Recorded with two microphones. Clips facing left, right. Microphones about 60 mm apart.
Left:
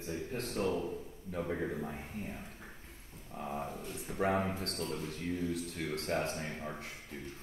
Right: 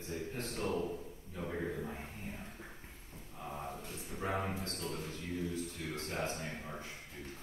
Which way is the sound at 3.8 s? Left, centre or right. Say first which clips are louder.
Left 7 dB; left.